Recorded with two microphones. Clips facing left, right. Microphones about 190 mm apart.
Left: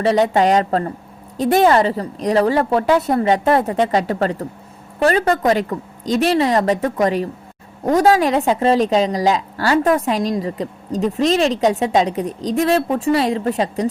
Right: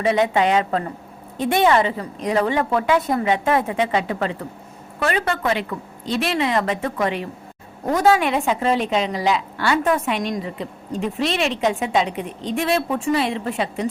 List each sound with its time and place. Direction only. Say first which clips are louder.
0.0 s a woman's voice: left 3 dB; 35° left (ahead or behind)